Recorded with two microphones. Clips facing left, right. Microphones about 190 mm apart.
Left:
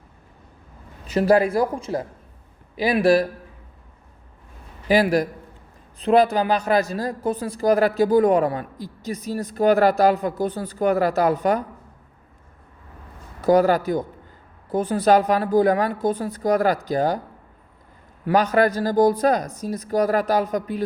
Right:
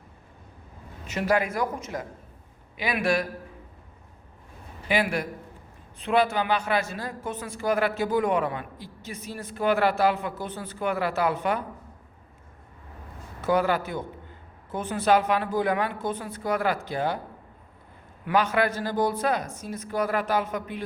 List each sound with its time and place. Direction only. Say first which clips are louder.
1.0 s a woman's voice: left 8 dB; 35° left (ahead or behind)
4.9 s a woman's voice: left 8 dB; 40° left (ahead or behind)
13.4 s a woman's voice: left 7 dB; 40° left (ahead or behind)
18.3 s a woman's voice: left 5 dB; 40° left (ahead or behind)